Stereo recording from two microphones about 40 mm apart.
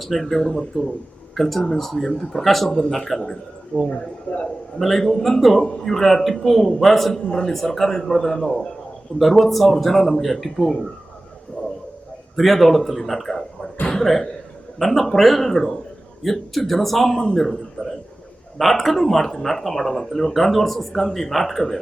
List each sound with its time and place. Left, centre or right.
0.0 s a man's voice: centre
3.8 s speech: left
4.4 s a man's voice: centre
11.6 s a sound: centre
12.4 s a man's voice: centre